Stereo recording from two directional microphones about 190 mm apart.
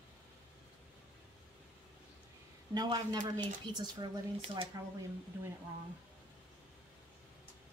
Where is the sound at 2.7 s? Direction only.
20° right (ahead or behind).